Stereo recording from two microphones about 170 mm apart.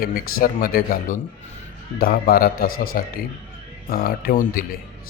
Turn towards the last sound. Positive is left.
turn(degrees=60)  # may be behind; listen again after turning